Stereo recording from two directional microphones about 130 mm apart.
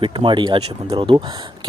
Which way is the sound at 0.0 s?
40° right (ahead or behind).